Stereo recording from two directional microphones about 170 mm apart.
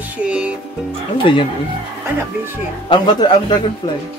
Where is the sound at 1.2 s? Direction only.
30° left (ahead or behind).